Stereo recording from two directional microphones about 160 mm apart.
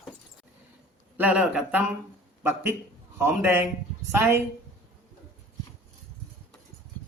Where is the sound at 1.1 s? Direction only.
5° right (ahead or behind).